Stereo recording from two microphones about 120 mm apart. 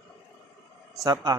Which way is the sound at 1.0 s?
35° right (ahead or behind).